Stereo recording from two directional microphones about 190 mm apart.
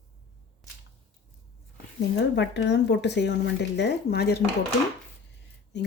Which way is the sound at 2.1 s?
65° left (ahead or behind).